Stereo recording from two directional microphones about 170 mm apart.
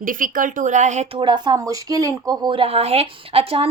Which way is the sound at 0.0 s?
50° right (ahead or behind).